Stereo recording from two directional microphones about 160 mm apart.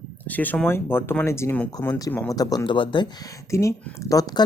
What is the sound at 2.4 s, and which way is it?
Speech, 25° left (ahead or behind).